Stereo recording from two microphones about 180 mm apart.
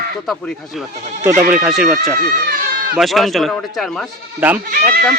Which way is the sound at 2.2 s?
55° right (ahead or behind).